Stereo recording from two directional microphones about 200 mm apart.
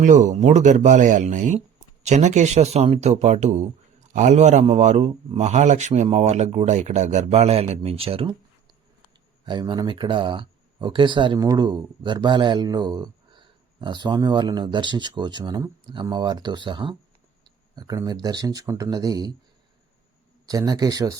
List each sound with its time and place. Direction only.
0.0 s a man's voice: 40° right (ahead or behind)
9.5 s speech: 20° right (ahead or behind)
20.5 s speech: 20° right (ahead or behind)